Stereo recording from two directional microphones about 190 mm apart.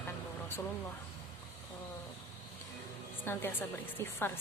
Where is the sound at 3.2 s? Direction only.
10° left (ahead or behind).